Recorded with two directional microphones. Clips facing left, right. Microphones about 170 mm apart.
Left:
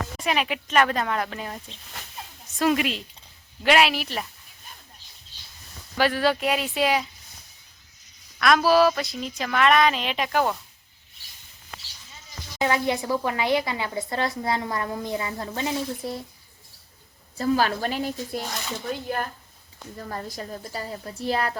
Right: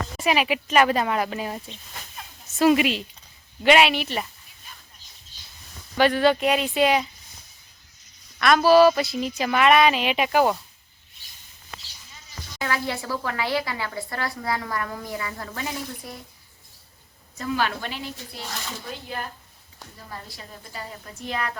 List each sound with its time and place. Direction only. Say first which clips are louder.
0.2 s a woman's voice: right 4 dB; 5° right (ahead or behind)
6.0 s a woman's voice: right 3 dB; 5° left (ahead or behind)
8.4 s a woman's voice: right 3 dB; centre (ahead or behind)
12.5 s speech: left 4 dB; 20° left (ahead or behind)
17.3 s a woman's voice: left 4 dB; 35° left (ahead or behind)
20.0 s a woman's voice: left 7 dB; 45° left (ahead or behind)